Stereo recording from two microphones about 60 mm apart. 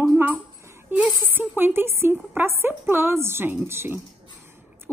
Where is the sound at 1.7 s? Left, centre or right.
Right.